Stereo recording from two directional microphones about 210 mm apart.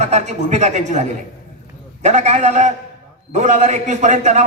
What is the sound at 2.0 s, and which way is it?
A man's voice, 35° right (ahead or behind).